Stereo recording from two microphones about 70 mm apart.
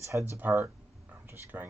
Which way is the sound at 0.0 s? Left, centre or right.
Right.